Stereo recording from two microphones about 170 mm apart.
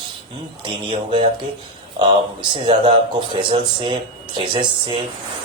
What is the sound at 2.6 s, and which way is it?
Speech, 30° right (ahead or behind).